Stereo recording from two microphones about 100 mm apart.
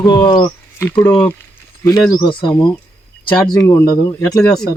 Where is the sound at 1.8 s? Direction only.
40° left (ahead or behind).